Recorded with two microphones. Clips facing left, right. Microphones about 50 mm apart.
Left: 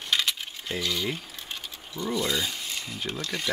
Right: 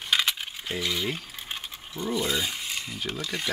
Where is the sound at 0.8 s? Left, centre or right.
Centre.